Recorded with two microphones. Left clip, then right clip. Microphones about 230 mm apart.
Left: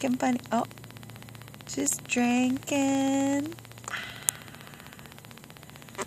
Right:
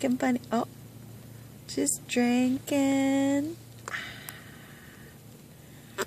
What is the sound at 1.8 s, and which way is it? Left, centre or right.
Speech, centre.